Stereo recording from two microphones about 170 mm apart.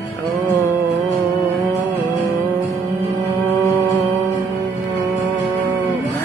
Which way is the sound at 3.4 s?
10° left (ahead or behind).